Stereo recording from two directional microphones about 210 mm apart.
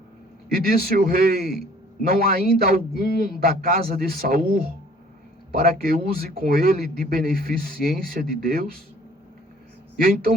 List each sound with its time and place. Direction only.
0.5 s a man's voice: 45° right (ahead or behind)
5.8 s a man's voice: 45° right (ahead or behind)
10.0 s a man's voice: 40° right (ahead or behind)